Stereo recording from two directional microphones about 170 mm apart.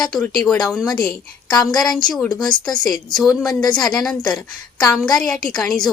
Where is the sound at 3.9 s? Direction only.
5° left (ahead or behind).